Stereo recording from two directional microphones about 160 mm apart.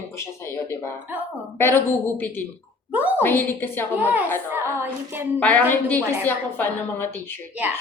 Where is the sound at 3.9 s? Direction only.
10° right (ahead or behind).